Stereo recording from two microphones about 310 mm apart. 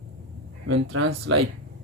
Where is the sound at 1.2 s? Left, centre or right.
Right.